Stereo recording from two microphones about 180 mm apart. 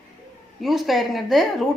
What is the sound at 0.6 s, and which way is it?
A woman's voice, centre (ahead or behind).